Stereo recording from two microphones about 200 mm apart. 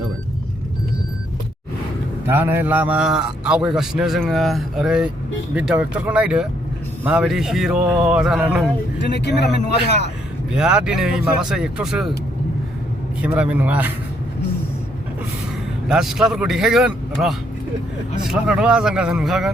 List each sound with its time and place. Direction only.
2.2 s a man's voice: 10° right (ahead or behind)
9.0 s speech: 60° left (ahead or behind)
10.5 s a man's voice: 5° right (ahead or behind)
13.2 s speech: 5° right (ahead or behind)
15.9 s a man's voice: centre (ahead or behind)